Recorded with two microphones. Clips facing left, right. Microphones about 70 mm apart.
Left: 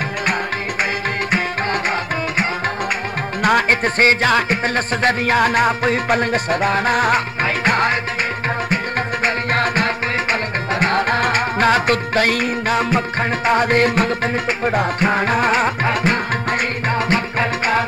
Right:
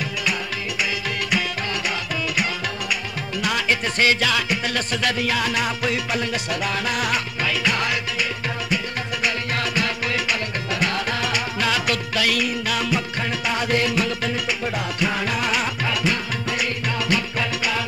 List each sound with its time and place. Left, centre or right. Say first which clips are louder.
3.4 s music: left 8 dB; left
9.2 s music: left 6 dB; left